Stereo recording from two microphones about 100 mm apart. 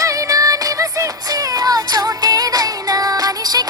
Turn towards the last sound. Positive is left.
turn(degrees=-40)  # may be behind; listen again after turning